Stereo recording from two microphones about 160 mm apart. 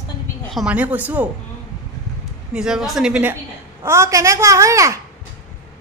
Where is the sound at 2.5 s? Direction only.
5° right (ahead or behind); by 5.0 s 20° right (ahead or behind).